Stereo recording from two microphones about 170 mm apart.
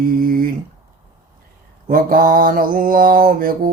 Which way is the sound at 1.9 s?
55° right (ahead or behind).